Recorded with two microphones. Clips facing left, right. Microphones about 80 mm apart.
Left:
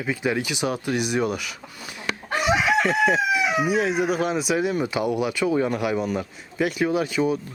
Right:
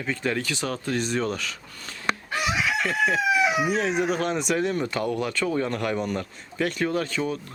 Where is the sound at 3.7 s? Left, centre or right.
Centre.